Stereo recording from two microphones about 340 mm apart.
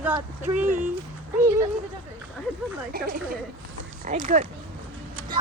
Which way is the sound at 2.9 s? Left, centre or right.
Right.